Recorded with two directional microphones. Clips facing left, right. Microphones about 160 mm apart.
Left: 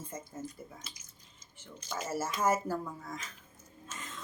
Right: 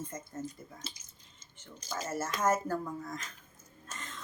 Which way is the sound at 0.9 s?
30° right (ahead or behind).